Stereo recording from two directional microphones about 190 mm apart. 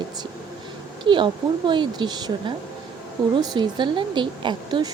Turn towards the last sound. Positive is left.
turn(degrees=-25)  # may be behind; listen again after turning